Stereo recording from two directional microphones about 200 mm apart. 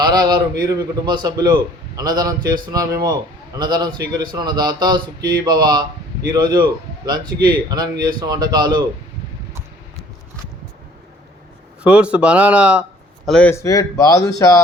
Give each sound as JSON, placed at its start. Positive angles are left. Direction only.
{"t": 0.0, "sound": "a man's voice", "side_deg": -20}
{"t": 11.8, "sound": "speech", "side_deg": -5}
{"t": 13.2, "sound": "speech", "side_deg": 5}